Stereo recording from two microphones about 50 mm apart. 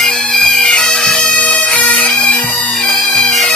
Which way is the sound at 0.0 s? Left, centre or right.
Centre.